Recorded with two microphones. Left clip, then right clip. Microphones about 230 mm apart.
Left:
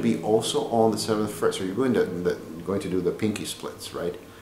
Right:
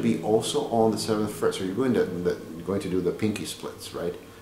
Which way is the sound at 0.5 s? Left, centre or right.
Left.